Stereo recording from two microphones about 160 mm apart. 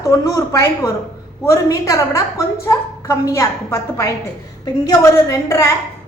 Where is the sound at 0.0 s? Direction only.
20° left (ahead or behind).